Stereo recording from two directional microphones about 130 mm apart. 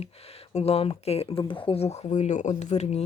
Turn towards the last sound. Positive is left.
turn(degrees=60)  # may be behind; listen again after turning